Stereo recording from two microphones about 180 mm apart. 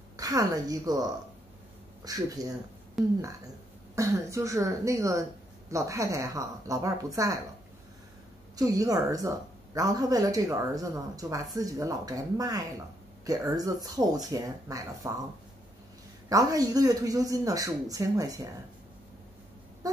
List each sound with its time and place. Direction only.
0.2 s speech: 20° right (ahead or behind)
3.0 s speech: centre (ahead or behind)
3.9 s speech: 15° right (ahead or behind)
8.5 s speech: 20° right (ahead or behind)
16.3 s speech: 20° right (ahead or behind)